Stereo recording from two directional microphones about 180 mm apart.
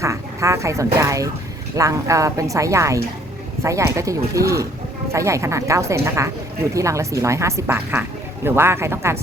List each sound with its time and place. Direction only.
0.0 s speech: 15° right (ahead or behind)